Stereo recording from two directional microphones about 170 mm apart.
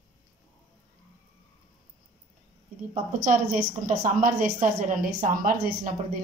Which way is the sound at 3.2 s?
45° right (ahead or behind).